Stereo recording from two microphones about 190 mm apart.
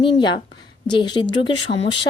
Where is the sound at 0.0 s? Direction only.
25° left (ahead or behind).